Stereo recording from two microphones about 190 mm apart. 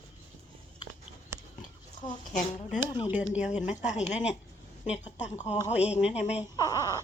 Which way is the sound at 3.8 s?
40° left (ahead or behind).